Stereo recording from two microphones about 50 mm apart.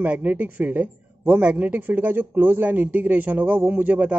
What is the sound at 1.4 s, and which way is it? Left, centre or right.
A man's voice, right.